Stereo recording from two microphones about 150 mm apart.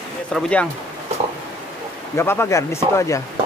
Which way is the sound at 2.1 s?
15° left (ahead or behind).